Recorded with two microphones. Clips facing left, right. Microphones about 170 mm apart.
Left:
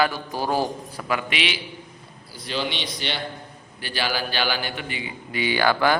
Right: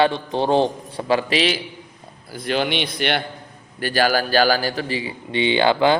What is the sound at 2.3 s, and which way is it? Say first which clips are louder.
Speech: right 7 dB; 55° right (ahead or behind).